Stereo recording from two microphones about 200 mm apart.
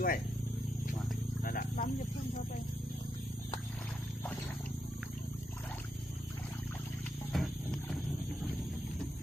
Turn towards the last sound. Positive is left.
turn(degrees=0)  # may be behind; listen again after turning